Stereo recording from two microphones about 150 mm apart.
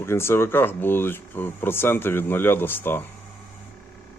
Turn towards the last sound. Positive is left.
turn(degrees=15)  # may be behind; listen again after turning